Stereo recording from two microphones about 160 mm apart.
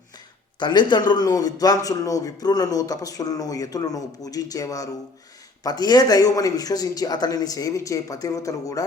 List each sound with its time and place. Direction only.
0.6 s a man's voice: 30° left (ahead or behind)